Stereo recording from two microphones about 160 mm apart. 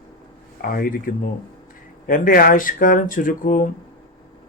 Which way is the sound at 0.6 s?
65° left (ahead or behind).